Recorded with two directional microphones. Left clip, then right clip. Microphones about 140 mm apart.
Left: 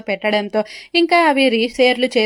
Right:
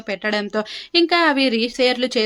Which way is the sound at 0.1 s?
25° left (ahead or behind).